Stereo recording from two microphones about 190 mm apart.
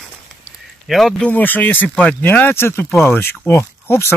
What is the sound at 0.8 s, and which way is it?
Speech, centre (ahead or behind).